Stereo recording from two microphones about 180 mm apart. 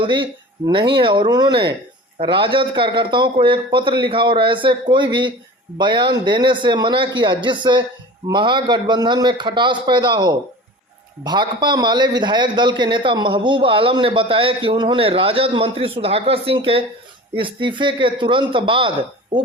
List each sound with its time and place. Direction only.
0.0 s a man's voice: 25° right (ahead or behind)